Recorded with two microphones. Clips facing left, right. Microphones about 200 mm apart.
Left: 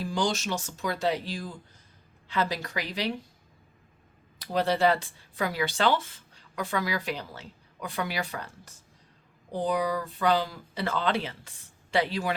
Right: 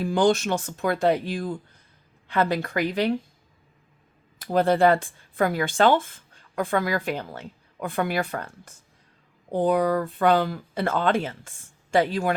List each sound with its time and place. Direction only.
0.0 s speech: 55° right (ahead or behind)
4.4 s speech: 50° right (ahead or behind)